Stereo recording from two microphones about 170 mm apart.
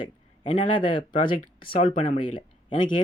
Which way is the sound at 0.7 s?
30° left (ahead or behind).